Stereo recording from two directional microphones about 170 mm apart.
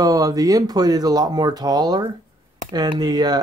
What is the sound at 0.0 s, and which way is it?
Speech, 20° right (ahead or behind).